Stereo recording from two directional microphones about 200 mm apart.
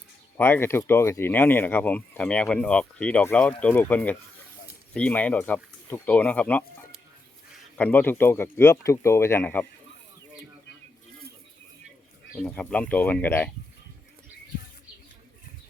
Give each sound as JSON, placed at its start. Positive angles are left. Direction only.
{"t": 0.3, "sound": "speech", "side_deg": 10}
{"t": 7.8, "sound": "speech", "side_deg": 10}
{"t": 12.4, "sound": "speech", "side_deg": 5}